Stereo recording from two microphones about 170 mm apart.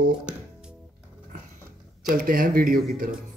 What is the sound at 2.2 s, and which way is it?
Speech, 55° right (ahead or behind).